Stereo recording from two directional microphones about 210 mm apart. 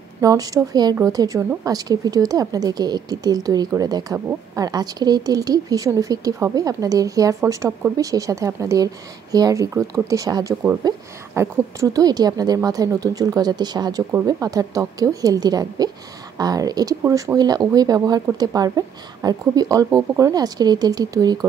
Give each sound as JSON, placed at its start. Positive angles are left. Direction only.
{"t": 0.2, "sound": "a woman's voice", "side_deg": -15}